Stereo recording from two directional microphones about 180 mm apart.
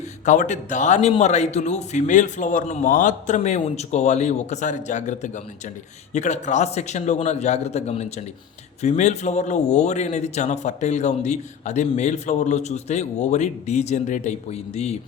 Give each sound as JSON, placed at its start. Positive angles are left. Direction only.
{"t": 0.3, "sound": "a man's voice", "side_deg": 40}